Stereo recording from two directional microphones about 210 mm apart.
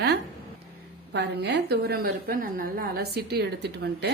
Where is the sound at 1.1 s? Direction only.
50° right (ahead or behind).